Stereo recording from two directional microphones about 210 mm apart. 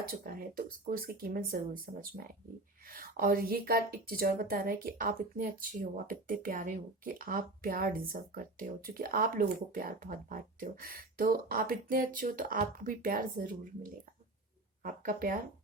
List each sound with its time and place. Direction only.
0.1 s a woman's voice: 45° right (ahead or behind)